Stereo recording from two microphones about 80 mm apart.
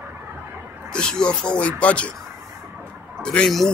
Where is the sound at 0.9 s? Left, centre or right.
Centre.